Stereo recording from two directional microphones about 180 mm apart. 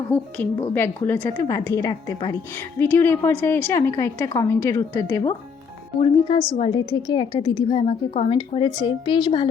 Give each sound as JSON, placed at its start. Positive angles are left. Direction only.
{"t": 0.1, "sound": "a woman's voice", "side_deg": 10}
{"t": 6.0, "sound": "a woman's voice", "side_deg": 30}